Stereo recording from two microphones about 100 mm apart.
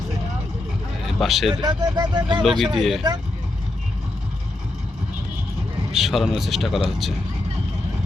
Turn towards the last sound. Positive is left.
turn(degrees=0)  # may be behind; listen again after turning